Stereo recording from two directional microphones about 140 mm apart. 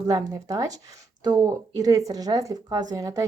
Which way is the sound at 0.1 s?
25° right (ahead or behind).